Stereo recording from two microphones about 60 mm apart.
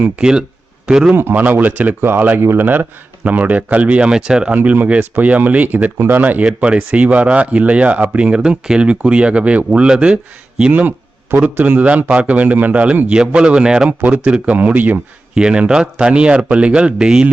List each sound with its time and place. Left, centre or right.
0.2 s speech: centre
1.1 s speech: right
2.0 s speech: right
2.4 s speech: right
3.2 s a man's voice: right
4.5 s a man's voice: right
6.4 s a man's voice: centre
8.4 s a man's voice: centre
10.6 s a sound: right
11.3 s a man's voice: right
15.4 s speech: centre